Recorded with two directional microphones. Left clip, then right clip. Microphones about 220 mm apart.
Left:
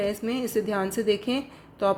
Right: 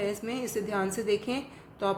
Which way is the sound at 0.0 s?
30° left (ahead or behind).